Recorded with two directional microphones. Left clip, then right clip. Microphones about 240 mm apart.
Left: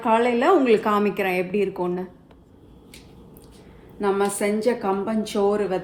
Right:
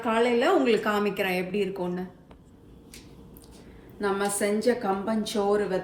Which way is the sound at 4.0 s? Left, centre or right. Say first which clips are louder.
Left 4 dB; left.